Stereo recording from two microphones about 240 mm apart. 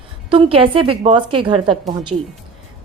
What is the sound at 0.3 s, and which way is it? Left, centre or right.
A woman's voice, right.